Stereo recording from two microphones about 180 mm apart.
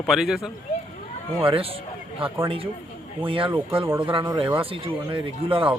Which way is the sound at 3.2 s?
30° right (ahead or behind).